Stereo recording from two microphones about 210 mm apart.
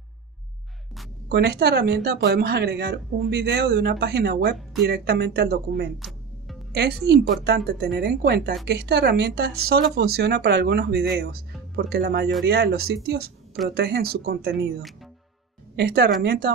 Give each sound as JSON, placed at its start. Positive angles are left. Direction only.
{"t": 1.3, "sound": "speech", "side_deg": -50}
{"t": 5.9, "sound": "music", "side_deg": 0}
{"t": 6.7, "sound": "speech", "side_deg": -50}
{"t": 15.7, "sound": "a woman's voice", "side_deg": -50}